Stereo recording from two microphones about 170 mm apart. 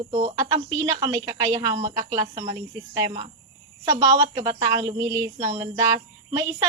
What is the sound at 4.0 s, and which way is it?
A woman's voice, 20° right (ahead or behind).